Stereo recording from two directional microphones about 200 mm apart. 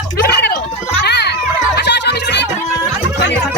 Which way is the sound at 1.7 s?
60° left (ahead or behind).